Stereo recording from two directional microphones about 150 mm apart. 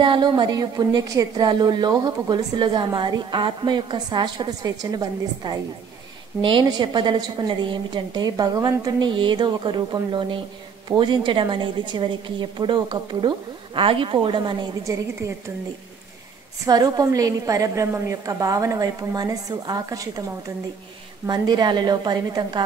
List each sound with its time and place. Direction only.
0.0 s a woman's voice: 30° right (ahead or behind)
16.6 s a woman's voice: 25° right (ahead or behind)
21.3 s a woman's voice: 30° right (ahead or behind)